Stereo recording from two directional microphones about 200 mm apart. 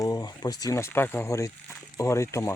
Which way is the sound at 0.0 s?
20° left (ahead or behind).